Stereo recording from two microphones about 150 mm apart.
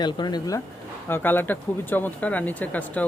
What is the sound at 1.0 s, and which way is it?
Speech, 15° left (ahead or behind).